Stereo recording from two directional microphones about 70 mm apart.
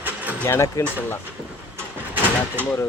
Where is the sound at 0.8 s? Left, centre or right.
Left.